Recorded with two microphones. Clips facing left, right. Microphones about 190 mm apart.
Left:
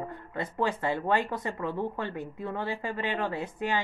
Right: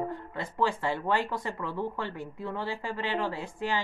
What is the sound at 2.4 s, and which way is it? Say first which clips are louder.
Speech: even; 55° left (ahead or behind).